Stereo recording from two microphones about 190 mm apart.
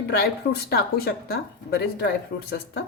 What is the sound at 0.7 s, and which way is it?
A woman's voice, 55° left (ahead or behind).